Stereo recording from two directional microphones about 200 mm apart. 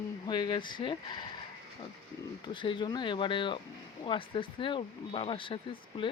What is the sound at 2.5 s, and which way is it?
Speech, 25° left (ahead or behind).